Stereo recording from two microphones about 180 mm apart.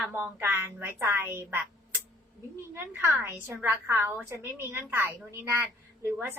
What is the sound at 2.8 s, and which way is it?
A woman's voice, 10° right (ahead or behind).